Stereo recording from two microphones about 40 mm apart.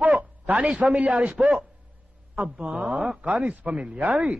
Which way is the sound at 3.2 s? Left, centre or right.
Right.